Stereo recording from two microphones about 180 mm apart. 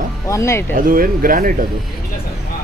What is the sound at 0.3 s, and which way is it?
Speech, 15° left (ahead or behind).